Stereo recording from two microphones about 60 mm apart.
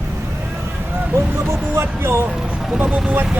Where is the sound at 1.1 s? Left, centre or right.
Right.